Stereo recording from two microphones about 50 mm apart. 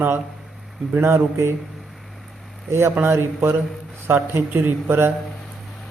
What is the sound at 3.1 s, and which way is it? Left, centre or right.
A man's voice, right.